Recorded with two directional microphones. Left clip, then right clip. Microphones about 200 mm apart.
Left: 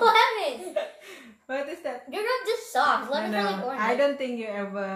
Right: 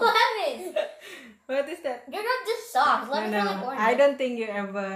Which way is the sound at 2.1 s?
5° left (ahead or behind).